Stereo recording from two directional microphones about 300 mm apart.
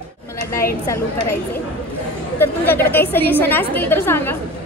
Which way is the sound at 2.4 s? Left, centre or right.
Centre.